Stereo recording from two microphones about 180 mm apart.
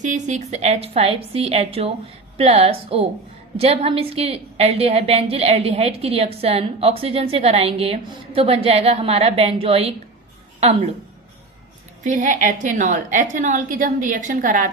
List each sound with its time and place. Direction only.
0.0 s a woman's voice: 40° right (ahead or behind)
12.0 s a woman's voice: 45° right (ahead or behind)